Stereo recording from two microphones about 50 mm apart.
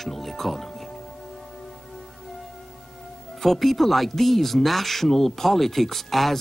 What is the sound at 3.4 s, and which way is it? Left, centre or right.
Speech, centre.